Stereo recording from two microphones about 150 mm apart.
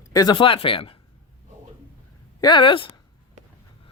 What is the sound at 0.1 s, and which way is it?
Speech, 25° left (ahead or behind).